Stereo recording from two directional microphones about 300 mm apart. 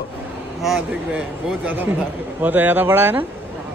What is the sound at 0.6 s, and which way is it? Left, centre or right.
Speech, centre.